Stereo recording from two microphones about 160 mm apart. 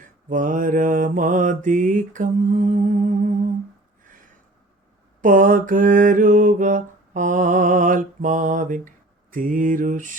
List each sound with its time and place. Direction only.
0.3 s mantra: 55° right (ahead or behind)
5.2 s mantra: 55° right (ahead or behind)